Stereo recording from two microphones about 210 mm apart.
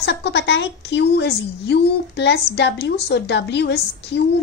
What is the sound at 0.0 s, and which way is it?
A woman's voice, 55° left (ahead or behind).